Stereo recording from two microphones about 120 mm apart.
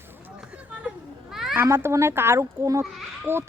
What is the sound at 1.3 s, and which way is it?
Children playing, 5° right (ahead or behind).